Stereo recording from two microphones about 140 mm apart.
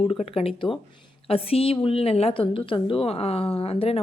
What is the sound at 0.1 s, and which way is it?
Speech, 45° left (ahead or behind).